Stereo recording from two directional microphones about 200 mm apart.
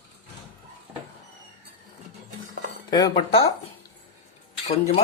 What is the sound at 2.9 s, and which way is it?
Speech, 20° left (ahead or behind).